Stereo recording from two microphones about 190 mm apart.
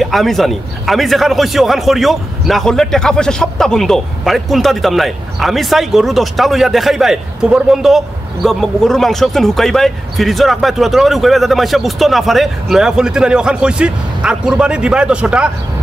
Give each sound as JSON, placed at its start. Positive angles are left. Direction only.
{"t": 0.0, "sound": "a man's voice", "side_deg": 0}